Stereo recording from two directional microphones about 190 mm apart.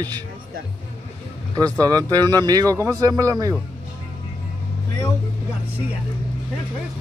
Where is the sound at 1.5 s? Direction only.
20° right (ahead or behind).